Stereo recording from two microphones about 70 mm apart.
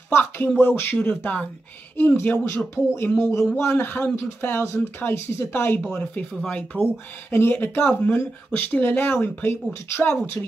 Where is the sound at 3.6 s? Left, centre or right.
Left.